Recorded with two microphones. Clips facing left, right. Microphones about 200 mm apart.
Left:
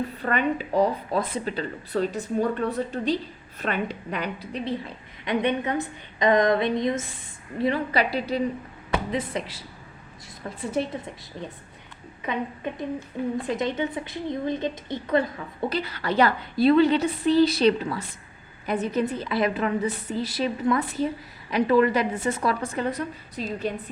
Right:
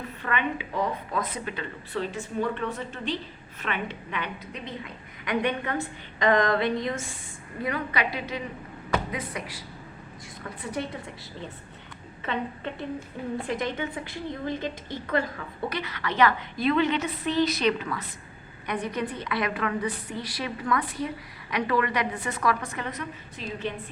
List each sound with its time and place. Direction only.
0.2 s a woman's voice: 40° left (ahead or behind); by 7.0 s 20° left (ahead or behind)
7.6 s a woman's voice: 30° left (ahead or behind)
12.2 s a woman's voice: 15° left (ahead or behind)
15.7 s a woman's voice: 30° left (ahead or behind)